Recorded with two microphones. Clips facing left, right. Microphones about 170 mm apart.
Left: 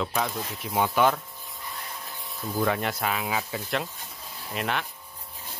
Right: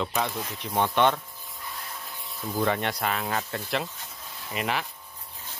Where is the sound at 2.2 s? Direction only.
Centre (ahead or behind).